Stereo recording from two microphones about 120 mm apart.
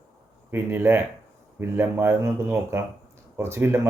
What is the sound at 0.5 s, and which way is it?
Speech, 15° right (ahead or behind).